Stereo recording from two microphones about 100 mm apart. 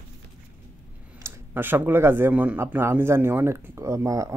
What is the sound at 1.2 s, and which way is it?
Speech, 20° right (ahead or behind).